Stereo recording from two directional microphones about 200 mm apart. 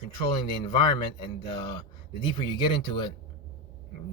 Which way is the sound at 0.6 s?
25° left (ahead or behind).